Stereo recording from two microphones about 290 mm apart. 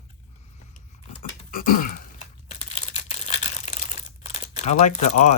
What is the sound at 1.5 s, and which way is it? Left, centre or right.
Crumpling, left.